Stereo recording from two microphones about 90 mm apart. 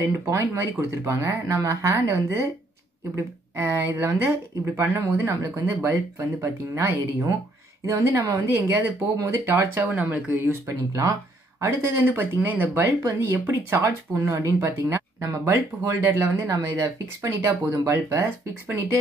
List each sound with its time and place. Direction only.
0.3 s speech: 30° right (ahead or behind)
3.5 s speech: 30° right (ahead or behind)
11.6 s speech: 30° right (ahead or behind)